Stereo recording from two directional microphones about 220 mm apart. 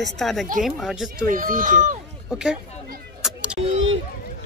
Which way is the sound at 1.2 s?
40° right (ahead or behind).